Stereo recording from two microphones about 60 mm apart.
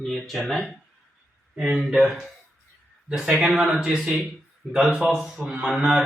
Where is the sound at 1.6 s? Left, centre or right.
Right.